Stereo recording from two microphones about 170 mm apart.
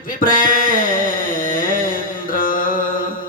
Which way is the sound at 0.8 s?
55° left (ahead or behind).